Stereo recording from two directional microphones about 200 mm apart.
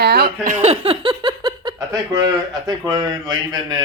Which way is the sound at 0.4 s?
35° right (ahead or behind).